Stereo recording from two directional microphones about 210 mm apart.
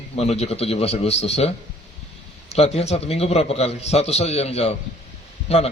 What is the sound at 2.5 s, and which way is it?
A man's voice, 30° left (ahead or behind).